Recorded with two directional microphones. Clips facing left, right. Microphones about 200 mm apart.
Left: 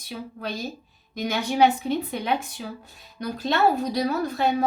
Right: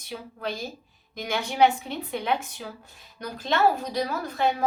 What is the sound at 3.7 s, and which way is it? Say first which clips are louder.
Speech: left 4 dB; 40° left (ahead or behind).